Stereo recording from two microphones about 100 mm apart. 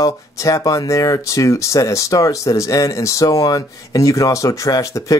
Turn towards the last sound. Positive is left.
turn(degrees=35)  # may be behind; listen again after turning